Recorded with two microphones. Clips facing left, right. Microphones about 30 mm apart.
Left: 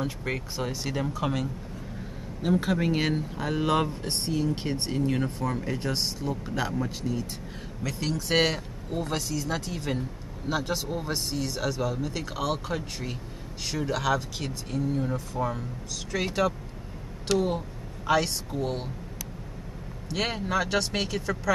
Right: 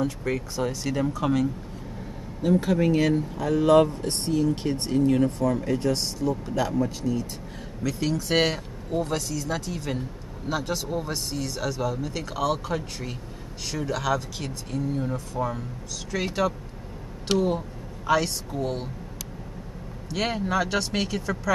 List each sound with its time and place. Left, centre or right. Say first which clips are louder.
0.0 s speech: right 4 dB; centre
7.8 s speech: right 4 dB; centre
20.1 s speech: right 2 dB; centre